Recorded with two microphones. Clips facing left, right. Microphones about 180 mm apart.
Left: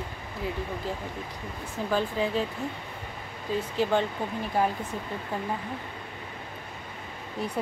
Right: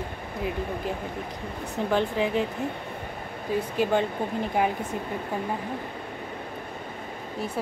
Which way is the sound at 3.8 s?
15° right (ahead or behind).